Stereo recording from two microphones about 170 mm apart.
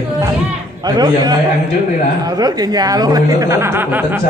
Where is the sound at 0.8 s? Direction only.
25° right (ahead or behind).